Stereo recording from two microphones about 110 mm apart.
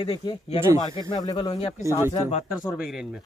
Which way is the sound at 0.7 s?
40° left (ahead or behind).